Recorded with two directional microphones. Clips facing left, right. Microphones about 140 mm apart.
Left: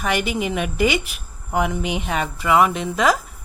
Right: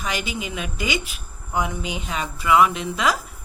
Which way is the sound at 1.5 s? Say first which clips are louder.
Left 4 dB; 60° left (ahead or behind).